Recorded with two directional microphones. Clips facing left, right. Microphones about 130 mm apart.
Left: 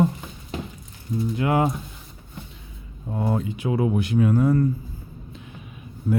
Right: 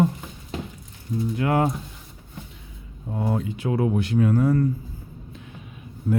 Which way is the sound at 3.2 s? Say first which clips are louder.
Left 1 dB; 35° left (ahead or behind).